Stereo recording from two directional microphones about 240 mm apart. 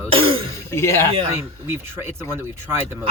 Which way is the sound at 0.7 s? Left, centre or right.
Centre.